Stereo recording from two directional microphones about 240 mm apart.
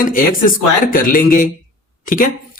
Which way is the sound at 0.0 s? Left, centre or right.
Left.